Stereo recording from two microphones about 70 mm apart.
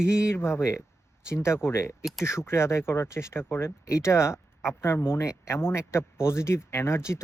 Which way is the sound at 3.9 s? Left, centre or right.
Left.